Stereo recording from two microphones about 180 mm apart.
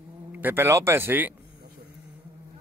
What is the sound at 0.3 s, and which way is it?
Speech, 10° right (ahead or behind).